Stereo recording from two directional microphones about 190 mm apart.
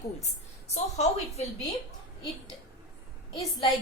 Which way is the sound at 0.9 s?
35° left (ahead or behind).